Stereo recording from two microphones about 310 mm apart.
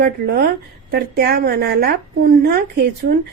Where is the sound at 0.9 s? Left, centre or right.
Right.